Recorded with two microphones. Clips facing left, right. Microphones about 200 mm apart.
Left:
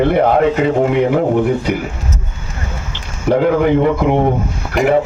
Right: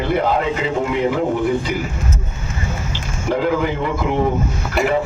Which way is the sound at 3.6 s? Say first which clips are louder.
Left 8 dB; 60° left (ahead or behind).